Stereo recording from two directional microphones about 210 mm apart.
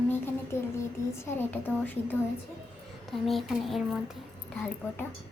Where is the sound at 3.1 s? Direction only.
Centre (ahead or behind).